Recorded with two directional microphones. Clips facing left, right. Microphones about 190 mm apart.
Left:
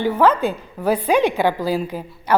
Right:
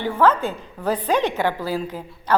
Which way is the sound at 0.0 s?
10° left (ahead or behind).